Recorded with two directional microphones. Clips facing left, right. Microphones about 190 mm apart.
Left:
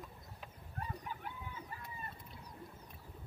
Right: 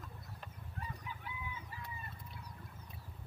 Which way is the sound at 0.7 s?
45° left (ahead or behind).